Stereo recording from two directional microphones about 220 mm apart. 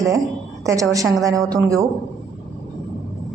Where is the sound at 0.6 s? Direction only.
15° right (ahead or behind).